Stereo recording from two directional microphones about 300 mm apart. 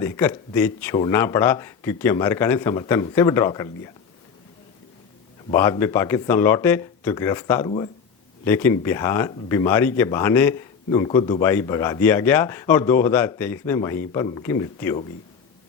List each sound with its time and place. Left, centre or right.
0.0 s speech: centre
5.5 s speech: centre